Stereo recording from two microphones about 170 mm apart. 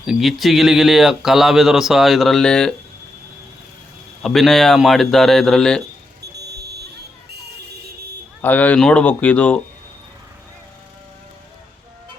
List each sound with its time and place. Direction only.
0.0 s speech: centre (ahead or behind)
4.2 s speech: centre (ahead or behind)
6.3 s a sound: 75° right (ahead or behind)
8.4 s speech: 10° left (ahead or behind)